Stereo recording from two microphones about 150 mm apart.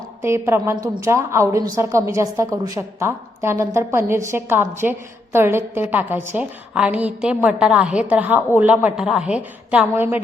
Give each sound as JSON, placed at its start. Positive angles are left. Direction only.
{"t": 0.2, "sound": "a woman's voice", "side_deg": -15}